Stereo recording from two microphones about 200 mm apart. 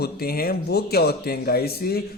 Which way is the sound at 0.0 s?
50° left (ahead or behind).